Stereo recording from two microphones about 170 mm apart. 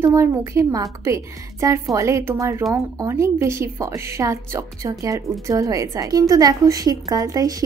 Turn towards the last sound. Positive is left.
turn(degrees=-20)  # may be behind; listen again after turning